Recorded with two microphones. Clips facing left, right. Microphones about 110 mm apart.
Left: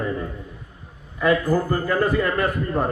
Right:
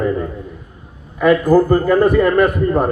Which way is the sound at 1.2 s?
55° right (ahead or behind).